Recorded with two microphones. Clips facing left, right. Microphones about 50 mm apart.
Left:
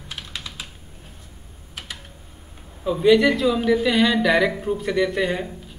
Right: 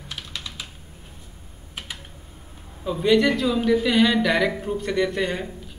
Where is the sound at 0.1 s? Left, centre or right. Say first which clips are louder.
Left 1 dB; centre.